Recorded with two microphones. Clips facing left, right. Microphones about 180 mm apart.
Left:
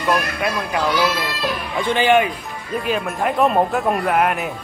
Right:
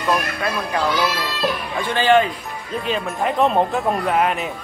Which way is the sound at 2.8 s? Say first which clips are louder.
Left 1 dB; 5° left (ahead or behind).